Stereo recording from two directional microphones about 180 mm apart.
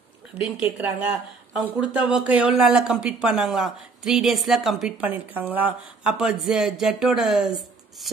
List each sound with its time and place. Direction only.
0.3 s speech: 5° right (ahead or behind)